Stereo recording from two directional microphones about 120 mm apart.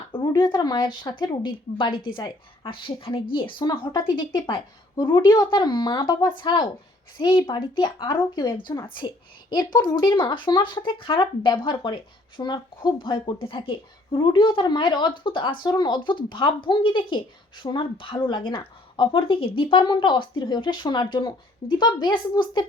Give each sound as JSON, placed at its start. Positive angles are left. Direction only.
{"t": 0.4, "sound": "speech", "side_deg": 35}